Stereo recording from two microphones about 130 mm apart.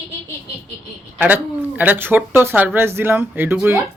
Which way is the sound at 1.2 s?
15° right (ahead or behind).